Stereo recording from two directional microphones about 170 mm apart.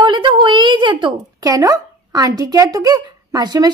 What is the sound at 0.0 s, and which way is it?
A woman's voice, 25° right (ahead or behind).